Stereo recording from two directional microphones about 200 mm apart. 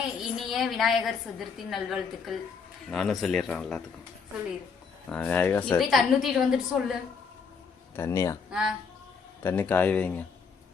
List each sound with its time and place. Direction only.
0.2 s a woman's voice: centre (ahead or behind)
5.0 s a woman's voice: 5° left (ahead or behind)
7.9 s speech: 15° left (ahead or behind)
8.4 s speech: 5° right (ahead or behind)
9.4 s speech: 10° left (ahead or behind)